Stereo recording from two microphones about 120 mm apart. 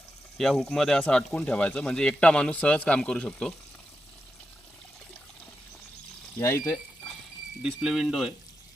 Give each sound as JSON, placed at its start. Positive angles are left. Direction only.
{"t": 0.3, "sound": "speech", "side_deg": 5}
{"t": 6.4, "sound": "speech", "side_deg": 20}
{"t": 7.6, "sound": "speech", "side_deg": -5}